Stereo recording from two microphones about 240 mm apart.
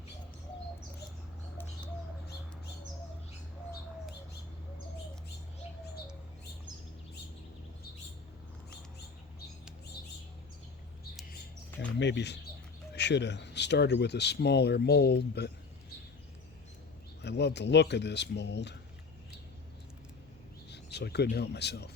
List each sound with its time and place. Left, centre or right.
11.8 s speech: left
17.2 s speech: left
20.7 s speech: left